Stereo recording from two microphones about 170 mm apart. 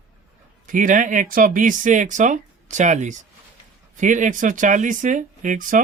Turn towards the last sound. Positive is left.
turn(degrees=-50)  # may be behind; listen again after turning